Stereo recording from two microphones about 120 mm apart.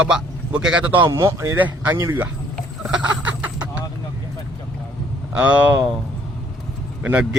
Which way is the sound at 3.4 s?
15° right (ahead or behind).